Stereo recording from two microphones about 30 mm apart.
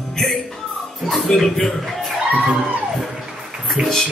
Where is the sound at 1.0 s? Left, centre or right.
Centre.